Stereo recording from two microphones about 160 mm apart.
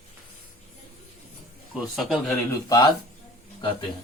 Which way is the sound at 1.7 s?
Centre (ahead or behind).